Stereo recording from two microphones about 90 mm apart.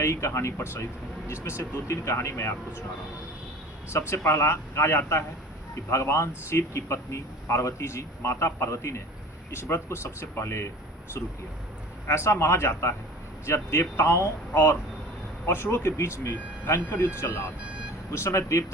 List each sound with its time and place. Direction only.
0.0 s speech: 30° left (ahead or behind)
3.8 s speech: 30° left (ahead or behind)
12.0 s speech: 30° left (ahead or behind)